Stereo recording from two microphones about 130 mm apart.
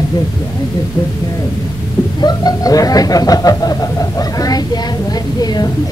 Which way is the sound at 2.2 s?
30° left (ahead or behind).